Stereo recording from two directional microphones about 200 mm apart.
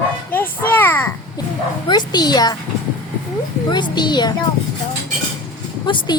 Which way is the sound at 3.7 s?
20° left (ahead or behind).